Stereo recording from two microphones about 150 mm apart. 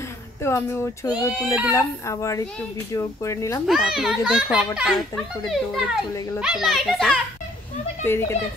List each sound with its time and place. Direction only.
0.4 s speech: 15° left (ahead or behind)
1.2 s a child's voice: 5° left (ahead or behind)
1.7 s speech: 20° left (ahead or behind)
3.6 s a child's voice: centre (ahead or behind)
8.0 s speech: 15° left (ahead or behind)